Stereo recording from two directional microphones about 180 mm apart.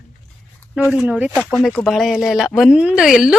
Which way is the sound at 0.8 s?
5° left (ahead or behind).